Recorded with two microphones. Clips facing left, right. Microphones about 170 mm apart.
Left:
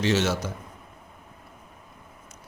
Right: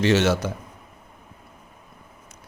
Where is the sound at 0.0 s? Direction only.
65° right (ahead or behind).